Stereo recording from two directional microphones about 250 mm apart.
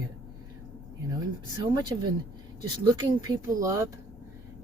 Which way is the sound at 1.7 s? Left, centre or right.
Centre.